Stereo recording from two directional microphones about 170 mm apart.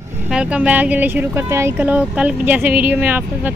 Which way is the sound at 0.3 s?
5° right (ahead or behind).